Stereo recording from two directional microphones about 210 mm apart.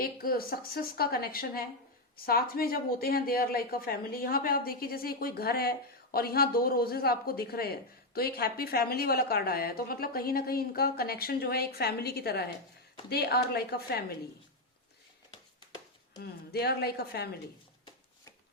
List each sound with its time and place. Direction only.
0.0 s speech: 45° left (ahead or behind)
16.2 s speech: 50° left (ahead or behind)